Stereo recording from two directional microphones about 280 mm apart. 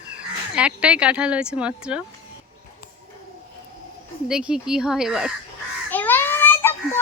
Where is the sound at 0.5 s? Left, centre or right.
Centre.